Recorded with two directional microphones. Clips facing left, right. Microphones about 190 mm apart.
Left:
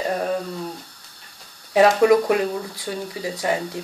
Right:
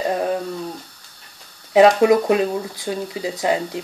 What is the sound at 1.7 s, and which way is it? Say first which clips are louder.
Speech: right 2 dB; 20° right (ahead or behind).